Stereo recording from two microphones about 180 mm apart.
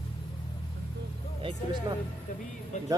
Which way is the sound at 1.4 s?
25° right (ahead or behind).